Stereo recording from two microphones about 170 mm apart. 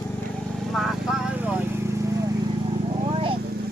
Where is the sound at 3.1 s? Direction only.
30° right (ahead or behind).